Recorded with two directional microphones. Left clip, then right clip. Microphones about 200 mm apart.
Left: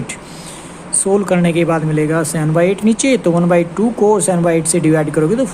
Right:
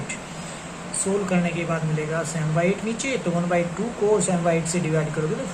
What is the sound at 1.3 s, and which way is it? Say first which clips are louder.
Speech: left 11 dB; 55° left (ahead or behind).